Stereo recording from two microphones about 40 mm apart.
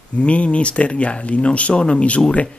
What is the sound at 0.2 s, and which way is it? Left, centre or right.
Speech, left.